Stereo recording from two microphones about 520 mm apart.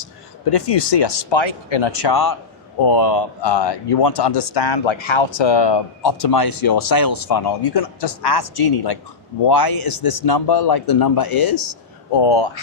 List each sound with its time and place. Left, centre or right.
0.5 s a man's voice: left
12.1 s speech: left